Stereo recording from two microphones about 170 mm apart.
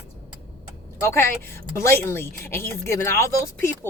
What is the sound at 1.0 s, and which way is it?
Speech, 15° left (ahead or behind).